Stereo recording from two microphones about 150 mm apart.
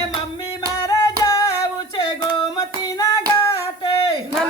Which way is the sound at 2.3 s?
25° left (ahead or behind).